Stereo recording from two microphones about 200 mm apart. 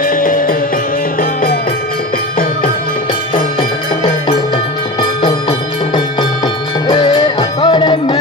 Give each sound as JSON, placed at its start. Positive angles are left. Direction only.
{"t": 0.0, "sound": "music", "side_deg": 45}
{"t": 3.3, "sound": "music", "side_deg": 25}